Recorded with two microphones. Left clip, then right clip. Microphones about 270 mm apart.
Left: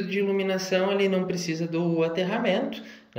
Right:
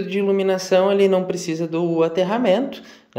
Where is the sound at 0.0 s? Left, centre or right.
Centre.